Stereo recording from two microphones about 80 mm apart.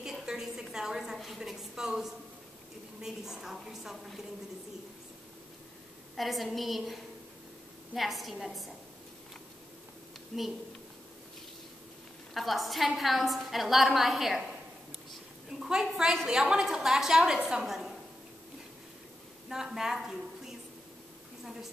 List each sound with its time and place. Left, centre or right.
0.0 s a woman's voice: centre
6.1 s a woman's voice: centre
10.3 s a woman's voice: centre
12.4 s a woman's voice: centre
15.6 s a woman's voice: centre
19.5 s a woman's voice: centre